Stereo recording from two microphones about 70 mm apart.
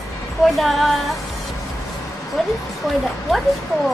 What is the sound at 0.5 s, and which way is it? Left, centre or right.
Music, centre.